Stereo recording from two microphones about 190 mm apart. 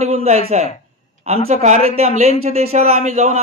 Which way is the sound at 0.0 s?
35° right (ahead or behind).